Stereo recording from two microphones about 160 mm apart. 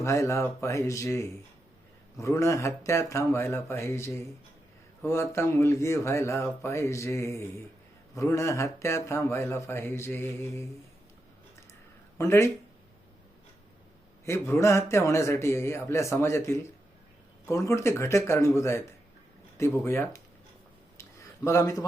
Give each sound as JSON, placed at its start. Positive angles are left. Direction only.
{"t": 0.0, "sound": "speech", "side_deg": 20}
{"t": 12.1, "sound": "speech", "side_deg": 15}
{"t": 14.3, "sound": "speech", "side_deg": 15}
{"t": 21.0, "sound": "a sound", "side_deg": 20}